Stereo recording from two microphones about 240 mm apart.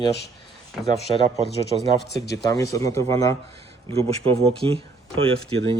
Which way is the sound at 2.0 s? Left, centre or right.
Left.